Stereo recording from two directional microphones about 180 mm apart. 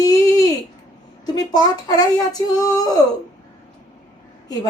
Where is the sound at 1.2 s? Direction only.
20° left (ahead or behind).